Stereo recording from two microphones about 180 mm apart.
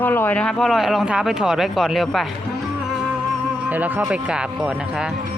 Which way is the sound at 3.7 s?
10° right (ahead or behind).